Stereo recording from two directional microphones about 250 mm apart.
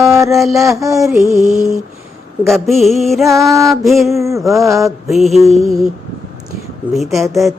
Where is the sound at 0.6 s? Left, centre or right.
Centre.